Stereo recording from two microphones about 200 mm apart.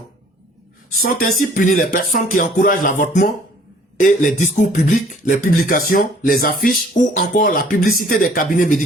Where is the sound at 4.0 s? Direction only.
40° left (ahead or behind).